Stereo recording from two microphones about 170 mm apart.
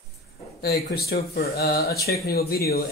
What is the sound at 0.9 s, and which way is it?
Speech, 65° left (ahead or behind).